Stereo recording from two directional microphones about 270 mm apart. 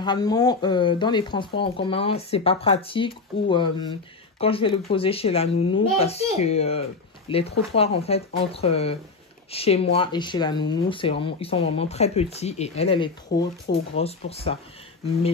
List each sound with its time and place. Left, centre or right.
0.0 s speech: centre